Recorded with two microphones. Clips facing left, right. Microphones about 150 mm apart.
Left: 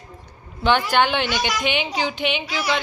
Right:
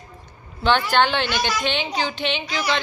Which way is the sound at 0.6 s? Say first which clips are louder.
Even; 15° left (ahead or behind).